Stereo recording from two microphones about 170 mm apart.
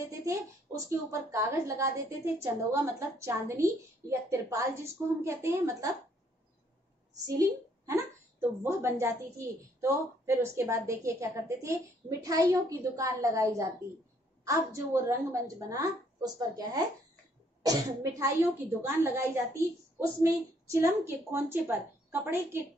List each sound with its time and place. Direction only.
0.0 s a woman's voice: 20° right (ahead or behind)
7.2 s a woman's voice: 20° right (ahead or behind)
18.2 s a woman's voice: 15° right (ahead or behind)